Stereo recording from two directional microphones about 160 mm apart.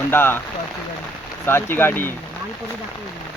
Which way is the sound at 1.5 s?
15° left (ahead or behind).